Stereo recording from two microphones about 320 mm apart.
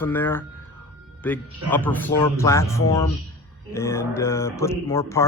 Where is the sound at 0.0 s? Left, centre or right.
Centre.